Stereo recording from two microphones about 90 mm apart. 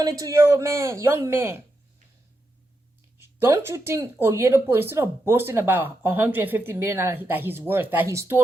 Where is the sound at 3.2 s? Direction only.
30° right (ahead or behind).